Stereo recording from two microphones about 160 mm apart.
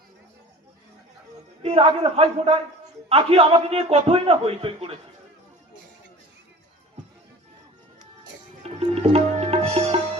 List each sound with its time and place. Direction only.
1.6 s a man's voice: 40° right (ahead or behind)
8.8 s music: 35° right (ahead or behind)